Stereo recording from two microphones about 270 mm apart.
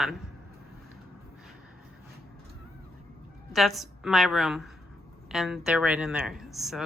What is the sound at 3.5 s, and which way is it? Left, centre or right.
Speech, centre.